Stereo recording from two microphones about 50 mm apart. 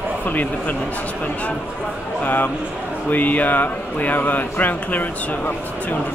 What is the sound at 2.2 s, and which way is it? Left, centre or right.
Speech, left.